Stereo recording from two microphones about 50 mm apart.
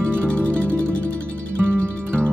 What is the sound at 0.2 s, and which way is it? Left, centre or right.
Music, left.